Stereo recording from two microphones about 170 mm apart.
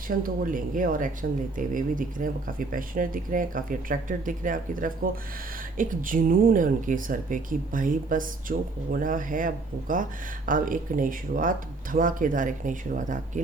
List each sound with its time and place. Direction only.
0.2 s speech: 55° right (ahead or behind)